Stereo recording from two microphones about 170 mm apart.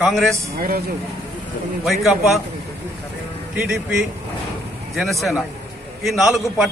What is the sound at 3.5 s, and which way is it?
A man's voice, 5° right (ahead or behind).